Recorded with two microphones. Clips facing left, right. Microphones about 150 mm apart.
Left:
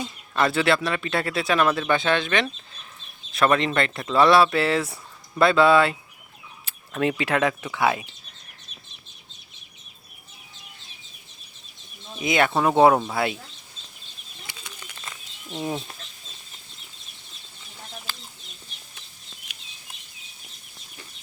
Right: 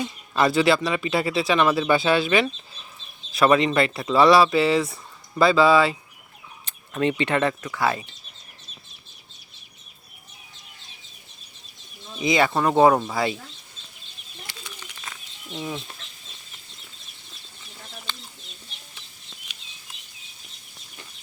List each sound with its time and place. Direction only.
0.0 s speech: centre (ahead or behind)
12.2 s speech: centre (ahead or behind)
15.5 s speech: 45° left (ahead or behind)
18.1 s chicken: 5° left (ahead or behind)